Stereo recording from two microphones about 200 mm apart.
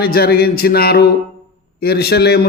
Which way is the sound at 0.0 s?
50° left (ahead or behind).